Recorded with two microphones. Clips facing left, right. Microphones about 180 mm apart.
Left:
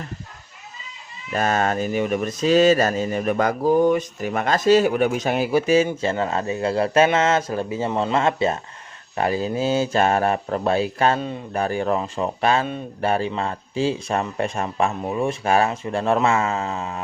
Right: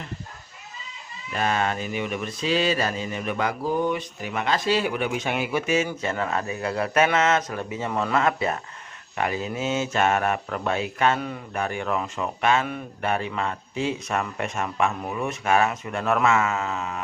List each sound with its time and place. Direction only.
1.3 s speech: 45° left (ahead or behind)